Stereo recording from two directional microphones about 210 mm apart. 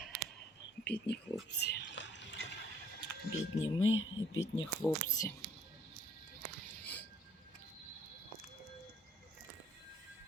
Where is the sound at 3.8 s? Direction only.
65° left (ahead or behind).